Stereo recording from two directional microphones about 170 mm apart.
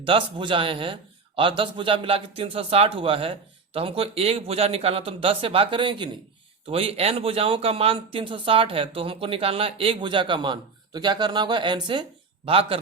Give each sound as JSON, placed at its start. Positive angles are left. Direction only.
{"t": 0.0, "sound": "speech", "side_deg": -30}